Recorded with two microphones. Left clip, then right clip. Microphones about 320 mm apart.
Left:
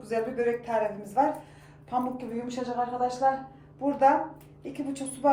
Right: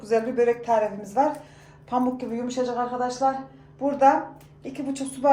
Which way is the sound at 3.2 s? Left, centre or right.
Right.